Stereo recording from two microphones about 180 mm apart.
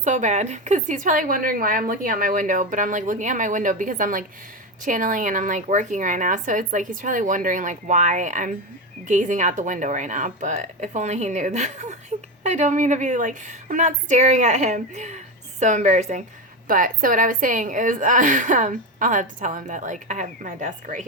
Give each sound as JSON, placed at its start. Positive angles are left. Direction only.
{"t": 0.0, "sound": "a woman's voice", "side_deg": -40}